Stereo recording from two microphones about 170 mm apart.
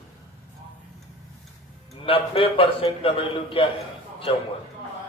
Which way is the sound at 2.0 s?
30° left (ahead or behind).